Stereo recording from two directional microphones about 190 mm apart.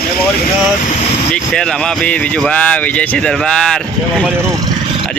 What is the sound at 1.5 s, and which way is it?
Speech, 5° left (ahead or behind).